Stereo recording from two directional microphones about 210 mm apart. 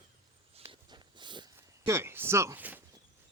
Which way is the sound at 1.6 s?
15° right (ahead or behind).